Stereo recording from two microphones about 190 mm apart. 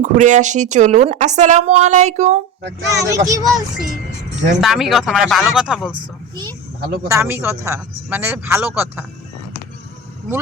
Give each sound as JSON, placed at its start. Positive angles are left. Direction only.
{"t": 0.0, "sound": "a woman's voice", "side_deg": -40}
{"t": 2.9, "sound": "speech", "side_deg": -15}
{"t": 3.4, "sound": "speech", "side_deg": 0}
{"t": 5.9, "sound": "speech", "side_deg": -25}
{"t": 7.1, "sound": "speech", "side_deg": -10}